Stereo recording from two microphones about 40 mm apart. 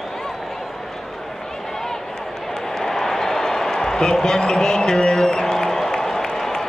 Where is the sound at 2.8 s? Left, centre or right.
Centre.